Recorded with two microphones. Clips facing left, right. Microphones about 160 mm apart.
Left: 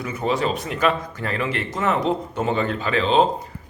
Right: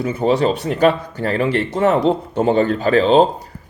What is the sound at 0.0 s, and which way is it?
A man's voice, 30° right (ahead or behind).